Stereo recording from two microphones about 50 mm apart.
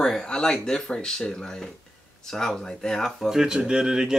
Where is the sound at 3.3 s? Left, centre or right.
Centre.